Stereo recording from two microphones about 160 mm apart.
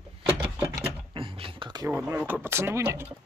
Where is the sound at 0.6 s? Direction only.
25° right (ahead or behind).